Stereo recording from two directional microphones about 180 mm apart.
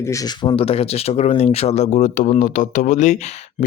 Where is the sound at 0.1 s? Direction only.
30° left (ahead or behind).